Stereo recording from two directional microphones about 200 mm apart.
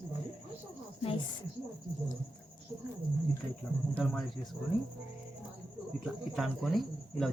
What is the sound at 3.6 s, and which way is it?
Speech, centre (ahead or behind).